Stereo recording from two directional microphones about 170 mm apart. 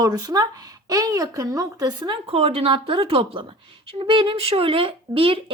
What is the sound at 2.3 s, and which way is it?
A woman's voice, 35° right (ahead or behind).